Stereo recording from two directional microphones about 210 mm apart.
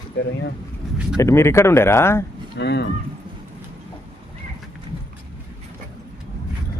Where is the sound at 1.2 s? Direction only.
15° left (ahead or behind).